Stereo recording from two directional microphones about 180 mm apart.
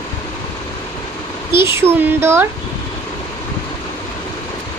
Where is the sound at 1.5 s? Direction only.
15° right (ahead or behind).